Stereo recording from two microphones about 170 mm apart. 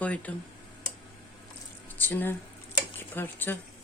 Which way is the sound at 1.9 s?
10° left (ahead or behind).